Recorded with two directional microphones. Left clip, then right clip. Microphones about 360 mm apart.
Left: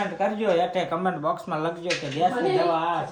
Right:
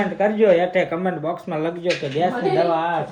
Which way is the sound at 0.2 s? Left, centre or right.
Centre.